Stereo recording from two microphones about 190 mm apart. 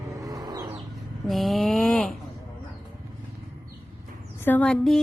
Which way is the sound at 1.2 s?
Centre (ahead or behind).